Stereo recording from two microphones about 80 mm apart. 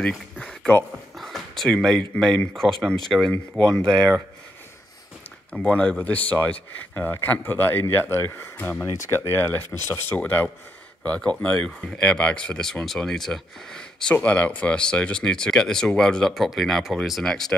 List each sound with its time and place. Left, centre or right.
0.4 s a sound: centre
1.1 s speech: centre
5.5 s speech: centre